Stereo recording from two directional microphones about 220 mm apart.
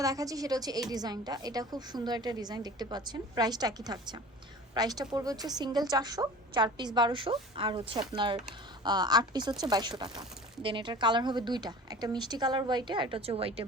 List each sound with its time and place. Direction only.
0.0 s a woman's voice: 15° right (ahead or behind)